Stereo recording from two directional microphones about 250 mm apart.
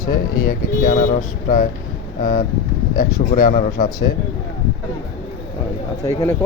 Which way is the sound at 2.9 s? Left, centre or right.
Left.